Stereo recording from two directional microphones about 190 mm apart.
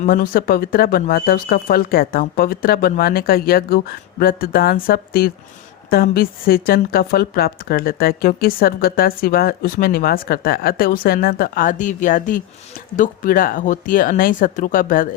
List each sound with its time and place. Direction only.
0.0 s speech: 50° left (ahead or behind)